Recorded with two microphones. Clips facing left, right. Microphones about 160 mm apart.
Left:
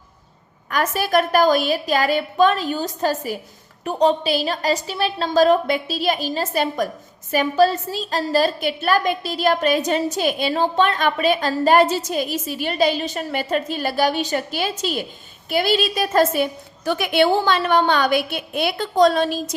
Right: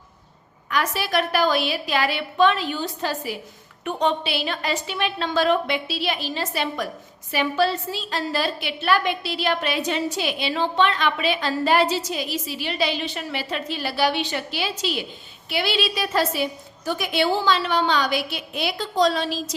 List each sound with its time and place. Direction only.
0.7 s a woman's voice: 45° left (ahead or behind)
16.8 s a woman's voice: 70° left (ahead or behind); by 19.5 s 50° left (ahead or behind)